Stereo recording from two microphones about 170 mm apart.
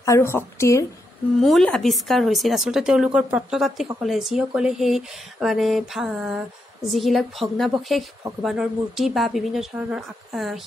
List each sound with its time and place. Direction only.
0.0 s speech: 15° left (ahead or behind)
1.4 s speech: centre (ahead or behind)